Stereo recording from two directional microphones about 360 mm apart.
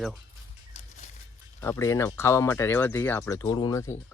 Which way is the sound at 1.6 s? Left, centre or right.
Centre.